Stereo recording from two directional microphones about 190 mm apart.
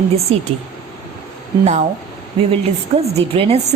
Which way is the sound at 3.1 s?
30° right (ahead or behind).